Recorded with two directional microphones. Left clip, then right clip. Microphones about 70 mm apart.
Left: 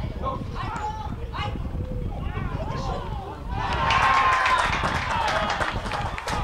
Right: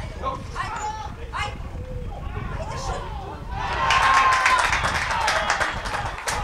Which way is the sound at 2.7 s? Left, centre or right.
Right.